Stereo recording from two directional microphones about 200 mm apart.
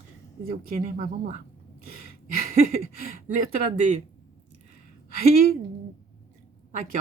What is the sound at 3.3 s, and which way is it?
Speech, 40° right (ahead or behind).